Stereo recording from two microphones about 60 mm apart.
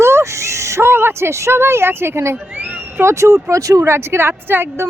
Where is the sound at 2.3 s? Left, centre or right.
Right.